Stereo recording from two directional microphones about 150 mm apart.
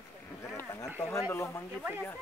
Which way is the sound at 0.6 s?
20° left (ahead or behind).